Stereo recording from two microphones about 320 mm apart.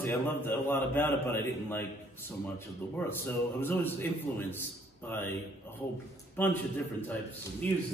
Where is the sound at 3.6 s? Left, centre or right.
Centre.